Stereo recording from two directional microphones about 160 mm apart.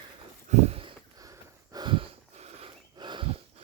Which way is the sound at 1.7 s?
30° right (ahead or behind).